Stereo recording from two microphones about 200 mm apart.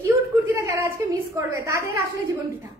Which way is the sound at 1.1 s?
15° right (ahead or behind).